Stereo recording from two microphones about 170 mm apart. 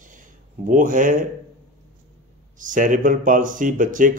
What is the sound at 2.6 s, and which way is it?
Speech, 50° right (ahead or behind).